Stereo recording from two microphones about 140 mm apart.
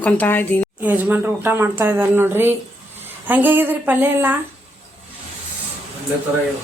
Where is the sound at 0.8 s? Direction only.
10° right (ahead or behind).